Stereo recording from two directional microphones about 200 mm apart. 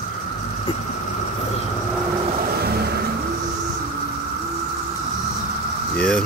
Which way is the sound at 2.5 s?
50° right (ahead or behind).